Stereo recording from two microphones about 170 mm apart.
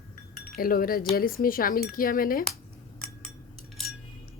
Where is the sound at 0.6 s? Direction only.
60° left (ahead or behind).